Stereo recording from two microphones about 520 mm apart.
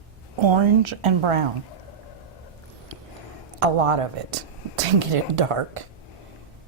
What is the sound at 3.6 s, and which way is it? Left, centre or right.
A woman's voice, right.